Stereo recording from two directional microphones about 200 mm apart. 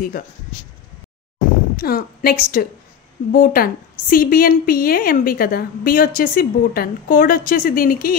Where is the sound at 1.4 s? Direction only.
50° left (ahead or behind).